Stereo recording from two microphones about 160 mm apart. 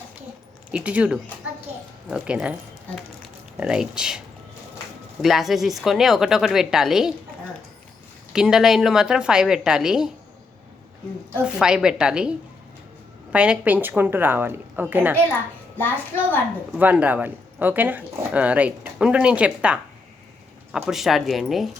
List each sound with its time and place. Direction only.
0.7 s speech: 10° right (ahead or behind)
5.2 s speech: centre (ahead or behind)
8.3 s speech: 5° right (ahead or behind)
11.4 s speech: 5° right (ahead or behind)
13.3 s speech: 5° right (ahead or behind)
15.8 s a child's voice: 15° left (ahead or behind)
16.7 s speech: 10° right (ahead or behind)